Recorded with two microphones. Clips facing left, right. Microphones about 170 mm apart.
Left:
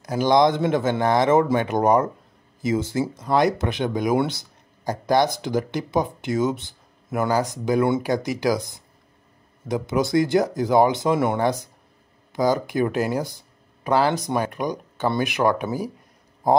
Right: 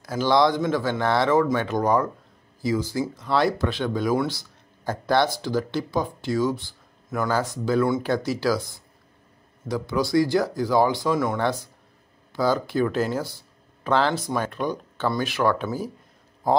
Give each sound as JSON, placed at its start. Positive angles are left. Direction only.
{"t": 0.0, "sound": "speech", "side_deg": 15}